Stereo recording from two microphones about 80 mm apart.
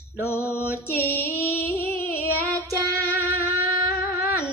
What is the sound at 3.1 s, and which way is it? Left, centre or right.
Music, left.